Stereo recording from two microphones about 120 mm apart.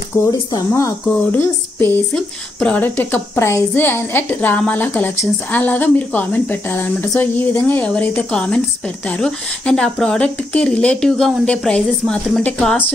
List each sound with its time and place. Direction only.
0.3 s speech: 30° left (ahead or behind)
1.3 s a woman's voice: 15° left (ahead or behind)